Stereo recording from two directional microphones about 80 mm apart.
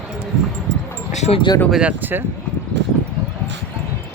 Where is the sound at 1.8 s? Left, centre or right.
Right.